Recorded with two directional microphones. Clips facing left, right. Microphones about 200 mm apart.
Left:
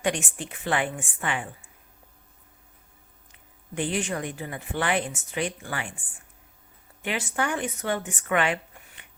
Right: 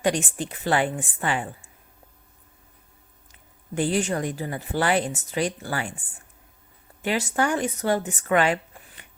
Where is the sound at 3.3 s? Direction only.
40° right (ahead or behind).